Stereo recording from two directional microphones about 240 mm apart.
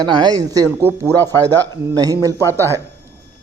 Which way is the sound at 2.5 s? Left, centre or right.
Centre.